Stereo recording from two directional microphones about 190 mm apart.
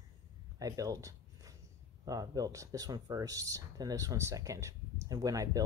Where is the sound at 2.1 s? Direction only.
20° right (ahead or behind).